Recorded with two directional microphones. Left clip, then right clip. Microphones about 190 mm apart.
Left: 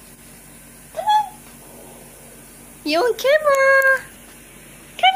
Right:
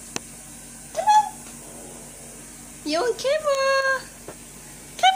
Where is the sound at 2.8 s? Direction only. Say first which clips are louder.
Left 5 dB; 40° left (ahead or behind).